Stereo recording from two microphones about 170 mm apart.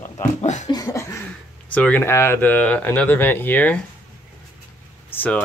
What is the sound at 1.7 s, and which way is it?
Speech, 10° left (ahead or behind).